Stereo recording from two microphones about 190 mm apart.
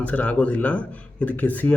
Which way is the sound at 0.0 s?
5° left (ahead or behind).